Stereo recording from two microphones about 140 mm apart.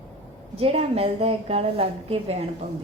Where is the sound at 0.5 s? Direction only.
45° right (ahead or behind).